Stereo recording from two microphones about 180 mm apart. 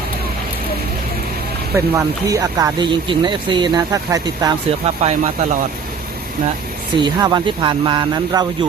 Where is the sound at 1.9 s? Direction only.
20° right (ahead or behind).